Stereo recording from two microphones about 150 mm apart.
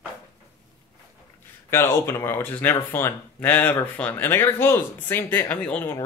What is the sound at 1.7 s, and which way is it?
Speech, 15° left (ahead or behind).